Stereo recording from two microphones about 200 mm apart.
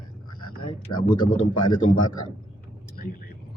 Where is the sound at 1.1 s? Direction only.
25° left (ahead or behind).